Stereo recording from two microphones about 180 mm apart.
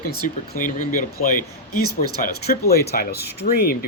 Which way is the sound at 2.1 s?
60° left (ahead or behind).